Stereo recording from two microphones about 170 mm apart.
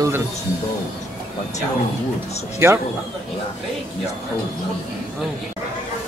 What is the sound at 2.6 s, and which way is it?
Speech, 15° right (ahead or behind).